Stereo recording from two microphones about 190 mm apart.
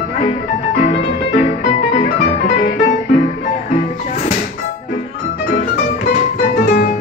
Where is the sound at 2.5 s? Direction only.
50° left (ahead or behind).